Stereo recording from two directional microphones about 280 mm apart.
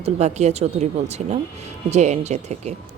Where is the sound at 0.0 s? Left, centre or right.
Right.